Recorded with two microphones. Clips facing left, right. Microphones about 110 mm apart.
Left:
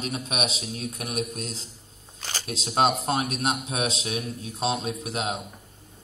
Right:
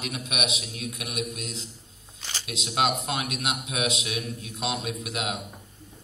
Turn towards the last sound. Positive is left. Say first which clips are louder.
# left 2 dB
turn(degrees=35)  # may be behind; listen again after turning